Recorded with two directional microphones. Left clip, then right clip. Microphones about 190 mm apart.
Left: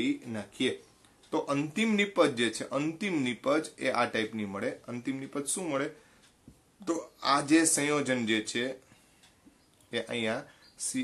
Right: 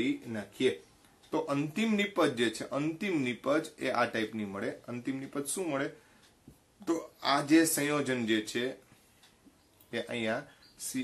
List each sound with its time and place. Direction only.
0.0 s speech: 25° left (ahead or behind)
9.8 s speech: 30° left (ahead or behind)